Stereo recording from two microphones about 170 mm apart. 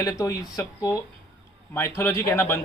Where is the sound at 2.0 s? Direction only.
15° left (ahead or behind).